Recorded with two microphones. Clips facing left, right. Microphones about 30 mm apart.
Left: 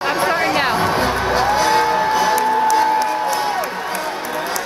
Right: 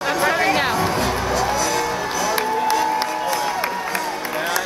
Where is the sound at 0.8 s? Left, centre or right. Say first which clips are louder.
Left 3 dB; left.